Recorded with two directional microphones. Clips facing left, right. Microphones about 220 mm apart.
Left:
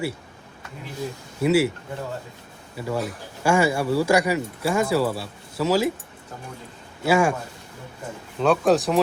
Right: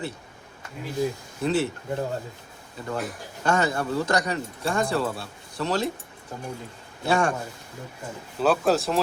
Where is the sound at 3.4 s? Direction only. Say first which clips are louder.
Left 4 dB; 10° left (ahead or behind).